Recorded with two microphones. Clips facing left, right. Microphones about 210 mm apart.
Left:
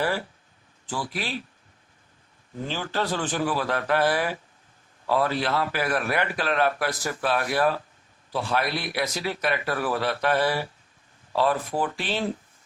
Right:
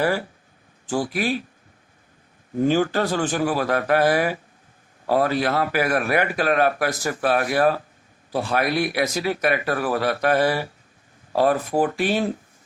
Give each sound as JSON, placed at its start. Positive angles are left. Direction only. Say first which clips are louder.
{"t": 0.9, "sound": "a man's voice", "louder": "right 8 dB", "side_deg": -45}
{"t": 2.6, "sound": "a man's voice", "louder": "right 10 dB", "side_deg": -50}